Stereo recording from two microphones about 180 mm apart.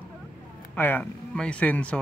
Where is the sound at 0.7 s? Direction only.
10° left (ahead or behind).